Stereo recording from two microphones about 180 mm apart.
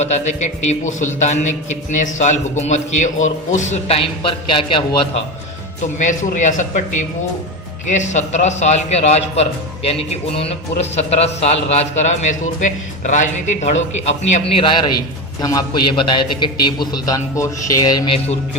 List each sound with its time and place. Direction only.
0.0 s a man's voice: 40° left (ahead or behind)
5.8 s a man's voice: 45° left (ahead or behind); by 18.2 s 20° left (ahead or behind)